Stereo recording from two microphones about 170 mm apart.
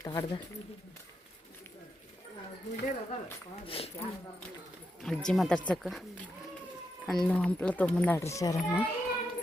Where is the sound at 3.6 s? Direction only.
35° left (ahead or behind).